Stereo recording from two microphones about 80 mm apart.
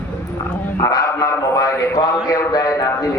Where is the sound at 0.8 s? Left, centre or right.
Left.